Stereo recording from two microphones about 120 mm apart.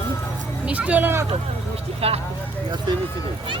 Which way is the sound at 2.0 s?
55° right (ahead or behind).